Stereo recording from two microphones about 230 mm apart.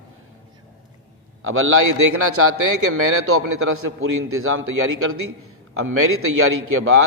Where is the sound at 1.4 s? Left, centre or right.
Right.